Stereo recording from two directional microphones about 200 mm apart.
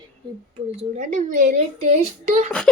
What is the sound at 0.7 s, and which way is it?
Speech, 35° right (ahead or behind).